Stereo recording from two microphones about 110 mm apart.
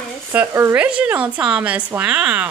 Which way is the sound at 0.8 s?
10° right (ahead or behind).